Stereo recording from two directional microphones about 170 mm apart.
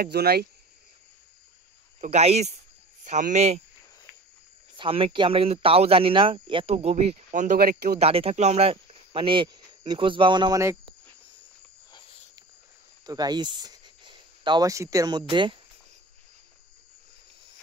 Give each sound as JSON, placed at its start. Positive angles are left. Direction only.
{"t": 0.0, "sound": "speech", "side_deg": -65}
{"t": 2.0, "sound": "speech", "side_deg": -40}
{"t": 4.7, "sound": "speech", "side_deg": -30}
{"t": 8.0, "sound": "speech", "side_deg": -35}
{"t": 13.0, "sound": "speech", "side_deg": -20}